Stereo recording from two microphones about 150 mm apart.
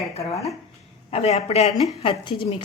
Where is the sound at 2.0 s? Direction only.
35° left (ahead or behind).